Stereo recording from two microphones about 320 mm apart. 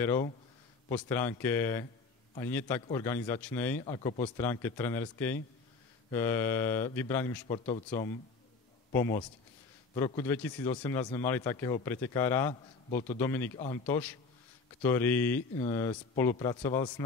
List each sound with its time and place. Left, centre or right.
0.0 s speech: centre
7.4 s speech: centre
8.9 s speech: centre